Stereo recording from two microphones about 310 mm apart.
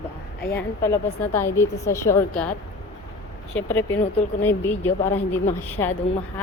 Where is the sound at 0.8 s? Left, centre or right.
Centre.